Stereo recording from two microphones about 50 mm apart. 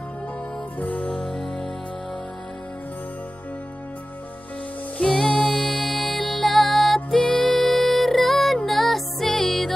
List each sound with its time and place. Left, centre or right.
0.7 s music: left
5.1 s music: centre
5.9 s music: centre
6.5 s music: centre